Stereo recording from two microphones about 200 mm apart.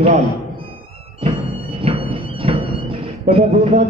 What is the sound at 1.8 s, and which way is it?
Music, 25° right (ahead or behind).